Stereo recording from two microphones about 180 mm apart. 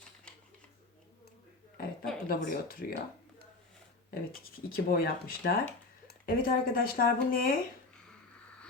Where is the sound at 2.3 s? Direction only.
50° left (ahead or behind).